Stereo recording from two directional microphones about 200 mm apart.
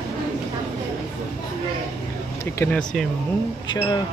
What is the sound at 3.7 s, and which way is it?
Speech, 20° left (ahead or behind).